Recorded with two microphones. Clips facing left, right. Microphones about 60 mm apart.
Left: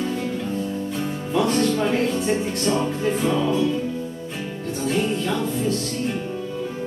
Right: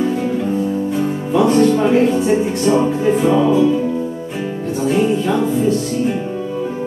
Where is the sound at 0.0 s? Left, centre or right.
Centre.